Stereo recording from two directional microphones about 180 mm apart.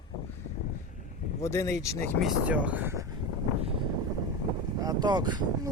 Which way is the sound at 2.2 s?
10° right (ahead or behind).